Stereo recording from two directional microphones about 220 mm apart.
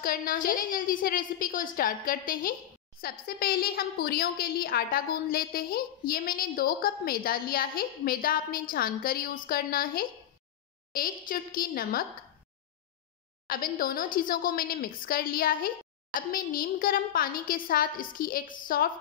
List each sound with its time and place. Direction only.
0.0 s a woman's voice: 40° left (ahead or behind)
13.5 s a woman's voice: 40° left (ahead or behind)